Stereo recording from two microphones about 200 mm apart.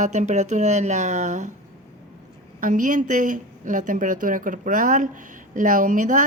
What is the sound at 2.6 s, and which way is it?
Speech, 40° right (ahead or behind).